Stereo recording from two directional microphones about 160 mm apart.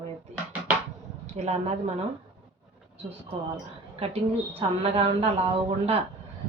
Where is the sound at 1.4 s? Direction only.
45° right (ahead or behind).